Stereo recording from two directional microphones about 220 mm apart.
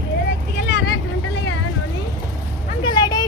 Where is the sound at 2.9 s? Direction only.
20° left (ahead or behind).